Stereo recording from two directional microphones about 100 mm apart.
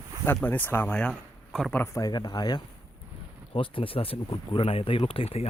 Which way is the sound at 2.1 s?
45° left (ahead or behind).